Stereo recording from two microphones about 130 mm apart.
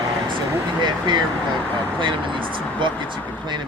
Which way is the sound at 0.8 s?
35° right (ahead or behind).